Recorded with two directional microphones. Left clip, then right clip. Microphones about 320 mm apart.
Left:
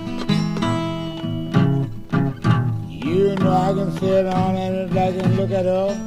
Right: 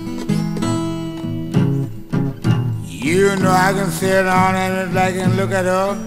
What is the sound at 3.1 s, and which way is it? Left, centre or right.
Music, right.